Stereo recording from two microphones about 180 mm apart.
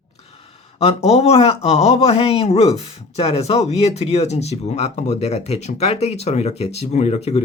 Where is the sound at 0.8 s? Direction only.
35° left (ahead or behind).